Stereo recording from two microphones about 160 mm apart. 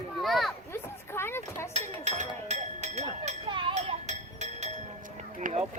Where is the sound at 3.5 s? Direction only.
30° right (ahead or behind).